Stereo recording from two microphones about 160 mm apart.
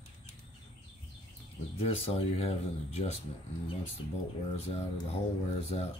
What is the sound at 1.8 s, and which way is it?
Speech, 40° left (ahead or behind).